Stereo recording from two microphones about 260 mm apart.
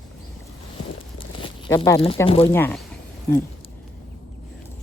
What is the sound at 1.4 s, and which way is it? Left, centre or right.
Speech, centre.